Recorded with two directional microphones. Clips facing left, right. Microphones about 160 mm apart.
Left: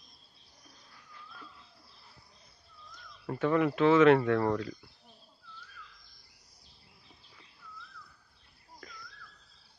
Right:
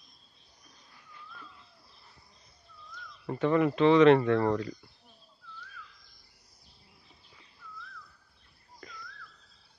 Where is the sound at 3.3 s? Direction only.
Centre (ahead or behind).